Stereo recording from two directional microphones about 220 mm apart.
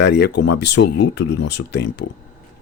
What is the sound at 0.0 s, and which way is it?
Speech, 50° left (ahead or behind).